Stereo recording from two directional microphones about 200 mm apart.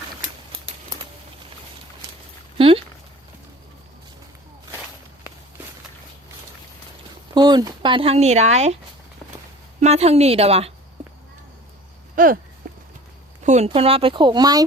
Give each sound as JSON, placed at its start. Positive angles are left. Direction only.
{"t": 2.6, "sound": "a sound", "side_deg": -25}
{"t": 7.3, "sound": "speech", "side_deg": -20}
{"t": 9.8, "sound": "a woman's voice", "side_deg": -30}
{"t": 12.1, "sound": "speech", "side_deg": -45}
{"t": 12.7, "sound": "clip-clop", "side_deg": -45}
{"t": 13.4, "sound": "speech", "side_deg": -35}